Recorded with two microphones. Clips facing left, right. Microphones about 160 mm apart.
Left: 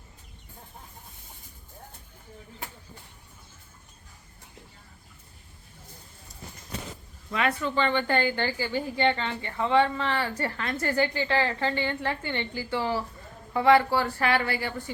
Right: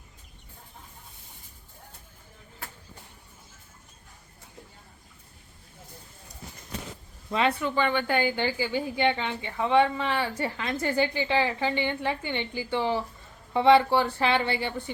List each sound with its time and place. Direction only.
7.3 s a woman's voice: 25° right (ahead or behind)
7.6 s a woman's voice: 10° right (ahead or behind)